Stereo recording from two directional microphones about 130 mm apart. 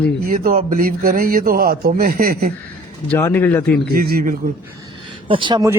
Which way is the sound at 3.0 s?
15° left (ahead or behind).